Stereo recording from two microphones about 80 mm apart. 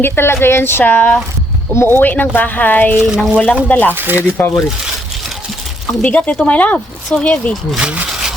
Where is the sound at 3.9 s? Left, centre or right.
Right.